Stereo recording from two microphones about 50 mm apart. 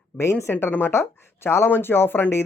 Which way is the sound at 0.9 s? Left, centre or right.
Left.